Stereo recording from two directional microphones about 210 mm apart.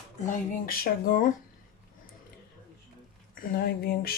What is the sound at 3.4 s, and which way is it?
Speech, 45° left (ahead or behind).